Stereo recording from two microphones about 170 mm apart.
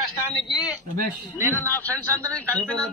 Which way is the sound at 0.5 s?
25° left (ahead or behind).